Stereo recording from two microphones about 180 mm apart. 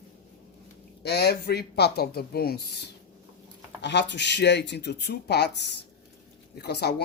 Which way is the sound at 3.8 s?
75° left (ahead or behind).